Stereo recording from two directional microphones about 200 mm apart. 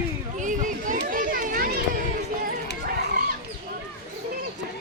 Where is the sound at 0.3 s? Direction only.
40° right (ahead or behind).